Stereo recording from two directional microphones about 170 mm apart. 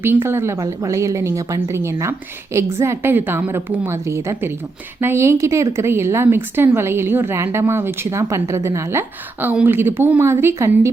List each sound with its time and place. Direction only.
0.0 s a woman's voice: 15° right (ahead or behind)